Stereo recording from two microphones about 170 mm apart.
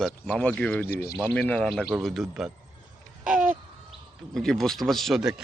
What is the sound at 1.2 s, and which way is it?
A man's voice, 10° left (ahead or behind).